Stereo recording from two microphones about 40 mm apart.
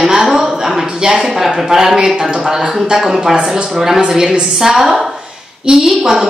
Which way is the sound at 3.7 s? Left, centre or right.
Centre.